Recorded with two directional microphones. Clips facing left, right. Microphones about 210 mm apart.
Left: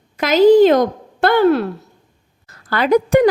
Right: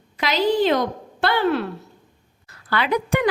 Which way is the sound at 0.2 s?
45° left (ahead or behind).